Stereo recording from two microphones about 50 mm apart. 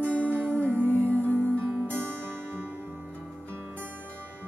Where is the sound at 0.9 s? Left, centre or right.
Left.